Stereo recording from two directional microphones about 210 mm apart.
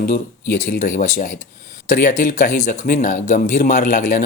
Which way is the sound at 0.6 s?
35° left (ahead or behind).